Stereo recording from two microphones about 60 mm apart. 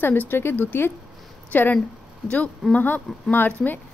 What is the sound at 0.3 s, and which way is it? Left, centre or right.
A woman's voice, left.